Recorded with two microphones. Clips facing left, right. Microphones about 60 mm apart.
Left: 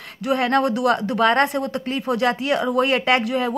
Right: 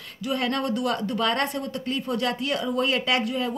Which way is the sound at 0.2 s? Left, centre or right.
Left.